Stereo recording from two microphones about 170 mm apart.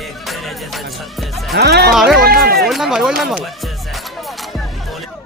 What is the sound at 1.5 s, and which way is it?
Speech, 70° right (ahead or behind).